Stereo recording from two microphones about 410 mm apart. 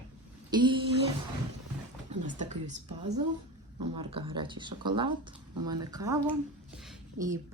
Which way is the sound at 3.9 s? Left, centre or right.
Centre.